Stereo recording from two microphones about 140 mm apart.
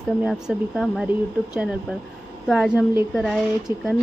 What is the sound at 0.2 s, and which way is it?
Speech, 5° right (ahead or behind).